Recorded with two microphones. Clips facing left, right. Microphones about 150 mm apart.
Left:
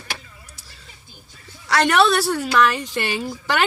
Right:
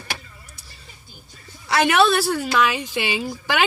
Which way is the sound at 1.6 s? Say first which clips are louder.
Even; 5° right (ahead or behind).